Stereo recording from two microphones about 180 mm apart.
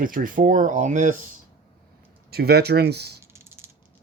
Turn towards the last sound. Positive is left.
turn(degrees=-65)  # may be behind; listen again after turning